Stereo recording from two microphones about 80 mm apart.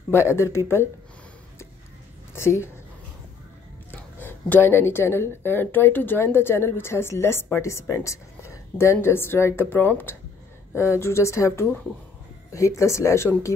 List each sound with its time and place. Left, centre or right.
0.1 s speech: left
2.3 s speech: left
4.2 s speech: left